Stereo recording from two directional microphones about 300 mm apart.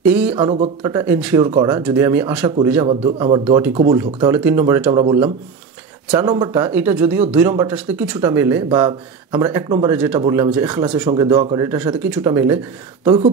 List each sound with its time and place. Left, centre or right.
0.0 s speech: centre